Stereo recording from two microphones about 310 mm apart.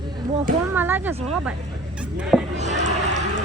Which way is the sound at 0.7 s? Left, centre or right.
Centre.